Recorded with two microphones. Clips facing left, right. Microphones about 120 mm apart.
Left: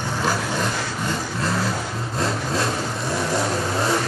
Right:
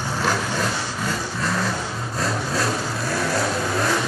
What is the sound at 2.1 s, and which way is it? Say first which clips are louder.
Vehicle: left 1 dB; 25° left (ahead or behind).